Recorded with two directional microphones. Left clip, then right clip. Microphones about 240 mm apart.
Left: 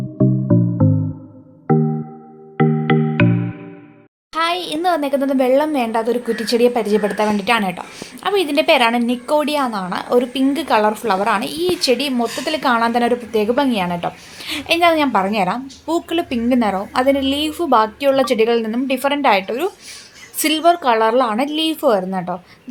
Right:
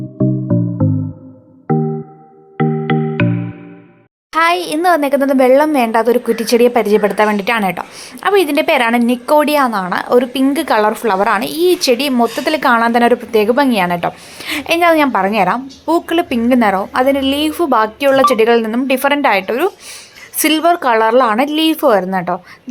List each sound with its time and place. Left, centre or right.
0.2 s music: centre
4.3 s a woman's voice: centre